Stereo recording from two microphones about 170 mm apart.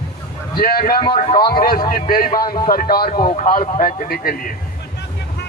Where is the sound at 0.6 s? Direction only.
60° left (ahead or behind).